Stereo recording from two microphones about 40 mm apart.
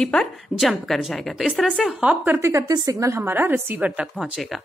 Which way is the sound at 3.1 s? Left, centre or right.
Right.